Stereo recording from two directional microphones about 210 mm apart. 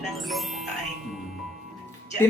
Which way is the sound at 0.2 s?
Centre (ahead or behind).